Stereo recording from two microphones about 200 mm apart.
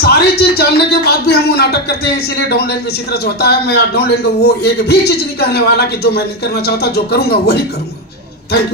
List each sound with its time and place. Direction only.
0.0 s a man's voice: 55° left (ahead or behind)